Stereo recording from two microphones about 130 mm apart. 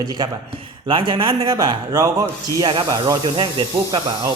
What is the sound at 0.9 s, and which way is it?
Speech, 40° right (ahead or behind).